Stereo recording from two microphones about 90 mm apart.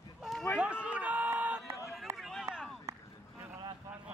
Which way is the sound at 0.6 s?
15° right (ahead or behind).